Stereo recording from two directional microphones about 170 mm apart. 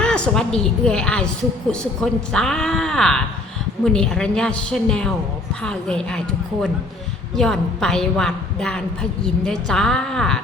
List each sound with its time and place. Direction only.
0.0 s a woman's voice: 5° left (ahead or behind)